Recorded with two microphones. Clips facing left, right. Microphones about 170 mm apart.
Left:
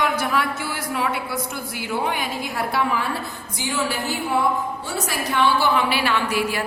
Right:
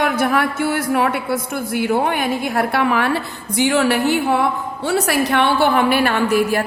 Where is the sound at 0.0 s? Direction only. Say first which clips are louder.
Right 5 dB; 55° right (ahead or behind).